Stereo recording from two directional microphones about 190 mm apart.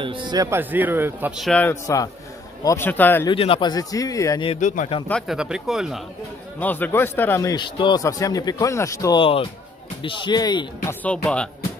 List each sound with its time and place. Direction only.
0.0 s a man's voice: 25° right (ahead or behind); by 3.3 s 10° left (ahead or behind)
3.3 s speech: 30° left (ahead or behind)
4.5 s speech: 40° left (ahead or behind)
5.0 s speech: centre (ahead or behind)
6.6 s a man's voice: 10° left (ahead or behind)
9.2 s speech: 30° left (ahead or behind)
11.0 s speech: 5° left (ahead or behind)